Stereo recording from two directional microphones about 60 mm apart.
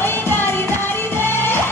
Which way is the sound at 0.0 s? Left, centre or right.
Left.